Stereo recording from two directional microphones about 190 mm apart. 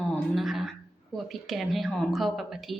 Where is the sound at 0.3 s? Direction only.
Centre (ahead or behind).